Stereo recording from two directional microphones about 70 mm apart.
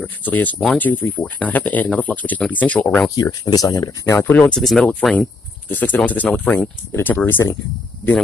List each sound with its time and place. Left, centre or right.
0.2 s speech: left
3.2 s speech: left
4.2 s speech: left
4.5 s speech: centre
5.7 s speech: left
6.9 s speech: left